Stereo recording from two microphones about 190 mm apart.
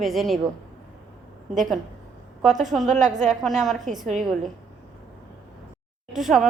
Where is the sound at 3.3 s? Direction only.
Centre (ahead or behind).